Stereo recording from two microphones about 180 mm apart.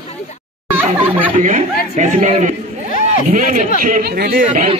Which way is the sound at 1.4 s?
45° right (ahead or behind).